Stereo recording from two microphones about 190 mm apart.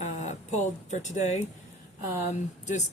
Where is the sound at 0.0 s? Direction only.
40° left (ahead or behind).